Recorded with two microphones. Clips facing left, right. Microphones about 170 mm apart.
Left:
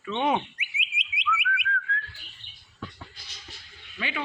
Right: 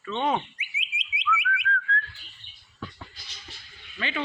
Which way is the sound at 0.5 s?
55° left (ahead or behind).